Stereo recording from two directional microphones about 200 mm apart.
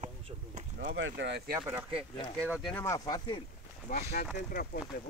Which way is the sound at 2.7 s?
10° left (ahead or behind).